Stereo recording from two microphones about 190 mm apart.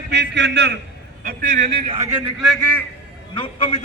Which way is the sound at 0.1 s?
65° right (ahead or behind).